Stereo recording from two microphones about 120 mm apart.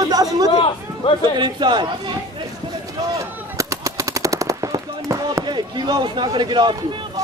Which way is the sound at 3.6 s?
25° right (ahead or behind).